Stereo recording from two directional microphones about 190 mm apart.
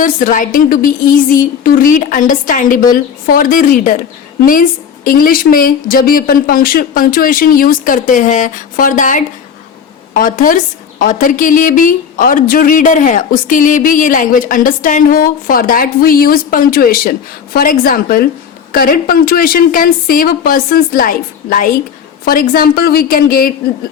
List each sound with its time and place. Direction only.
0.0 s speech: 45° left (ahead or behind)